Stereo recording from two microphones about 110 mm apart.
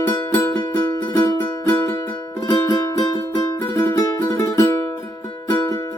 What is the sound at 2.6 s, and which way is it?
Music, 30° left (ahead or behind).